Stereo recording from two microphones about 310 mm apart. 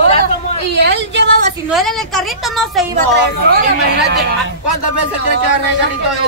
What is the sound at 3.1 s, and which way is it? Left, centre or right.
Speech, right.